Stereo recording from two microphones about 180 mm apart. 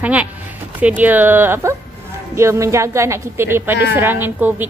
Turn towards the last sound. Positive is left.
turn(degrees=-10)  # may be behind; listen again after turning